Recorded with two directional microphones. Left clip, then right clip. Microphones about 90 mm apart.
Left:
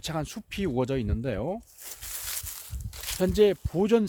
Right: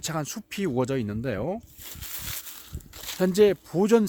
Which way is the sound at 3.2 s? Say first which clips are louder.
Right 2 dB; 90° right.